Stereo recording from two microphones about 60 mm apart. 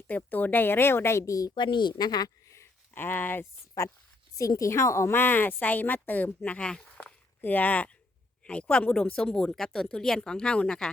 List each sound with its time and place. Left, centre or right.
0.1 s speech: left
1.2 s a woman's voice: left
2.1 s a sound: left
2.9 s speech: left
4.4 s a woman's voice: left
5.1 s speech: left
6.6 s speech: centre
6.8 s walk: left
8.4 s speech: centre